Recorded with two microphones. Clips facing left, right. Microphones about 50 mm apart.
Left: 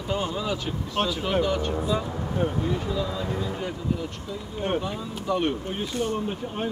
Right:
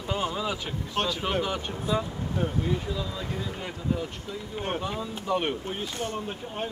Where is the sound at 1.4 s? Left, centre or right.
Centre.